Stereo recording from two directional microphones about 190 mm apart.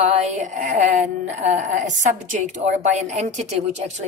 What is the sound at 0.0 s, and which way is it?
A woman's voice, 35° right (ahead or behind).